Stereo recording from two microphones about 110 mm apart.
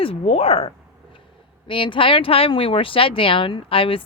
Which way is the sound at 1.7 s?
50° left (ahead or behind).